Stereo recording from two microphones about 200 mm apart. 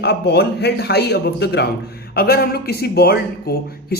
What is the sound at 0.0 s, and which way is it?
A man's voice, 55° left (ahead or behind).